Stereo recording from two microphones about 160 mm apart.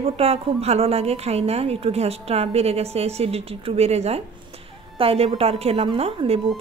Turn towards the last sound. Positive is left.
turn(degrees=-40)  # may be behind; listen again after turning